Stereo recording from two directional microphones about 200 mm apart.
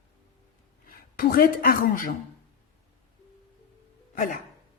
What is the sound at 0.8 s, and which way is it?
Speech, 45° left (ahead or behind).